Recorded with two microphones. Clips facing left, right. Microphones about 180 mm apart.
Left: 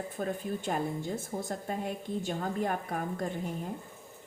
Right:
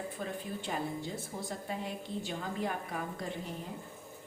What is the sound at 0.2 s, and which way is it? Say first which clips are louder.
A woman's voice: left 5 dB; 50° left (ahead or behind).